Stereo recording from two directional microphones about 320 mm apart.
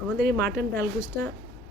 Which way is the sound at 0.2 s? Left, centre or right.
Right.